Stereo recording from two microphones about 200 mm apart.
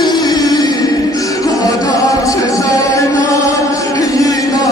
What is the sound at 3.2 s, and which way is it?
Music, 15° left (ahead or behind).